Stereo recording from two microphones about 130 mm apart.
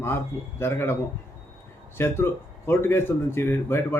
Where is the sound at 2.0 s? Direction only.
20° left (ahead or behind).